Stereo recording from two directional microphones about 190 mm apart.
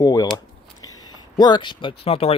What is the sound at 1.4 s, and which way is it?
Speech, 25° left (ahead or behind).